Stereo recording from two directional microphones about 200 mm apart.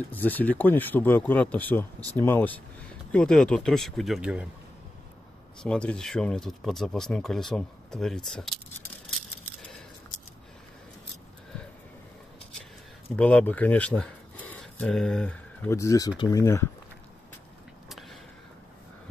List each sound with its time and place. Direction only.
0.1 s speech: 10° left (ahead or behind)
5.6 s speech: 5° left (ahead or behind)
13.1 s speech: 5° left (ahead or behind)